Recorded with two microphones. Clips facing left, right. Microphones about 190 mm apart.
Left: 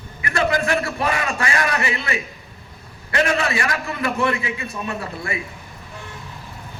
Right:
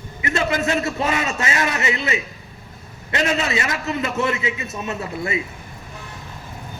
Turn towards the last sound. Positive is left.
turn(degrees=-20)  # may be behind; listen again after turning